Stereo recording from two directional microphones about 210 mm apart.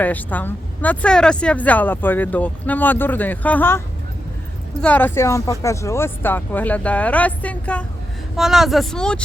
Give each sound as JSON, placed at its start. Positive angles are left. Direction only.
{"t": 0.0, "sound": "speech", "side_deg": 10}